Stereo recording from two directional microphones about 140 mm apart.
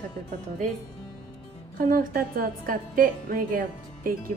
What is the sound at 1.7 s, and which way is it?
A woman's voice, 80° right.